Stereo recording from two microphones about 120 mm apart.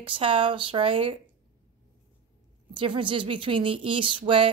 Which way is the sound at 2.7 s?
45° right (ahead or behind).